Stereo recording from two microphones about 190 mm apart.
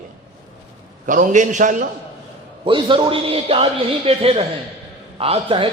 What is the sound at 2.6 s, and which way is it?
A man's voice, 25° right (ahead or behind).